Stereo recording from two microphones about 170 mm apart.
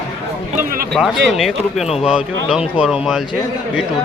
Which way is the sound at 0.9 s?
Centre (ahead or behind).